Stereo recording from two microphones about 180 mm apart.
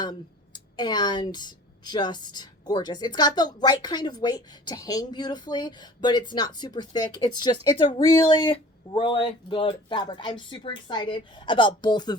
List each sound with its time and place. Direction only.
0.0 s speech: 25° left (ahead or behind)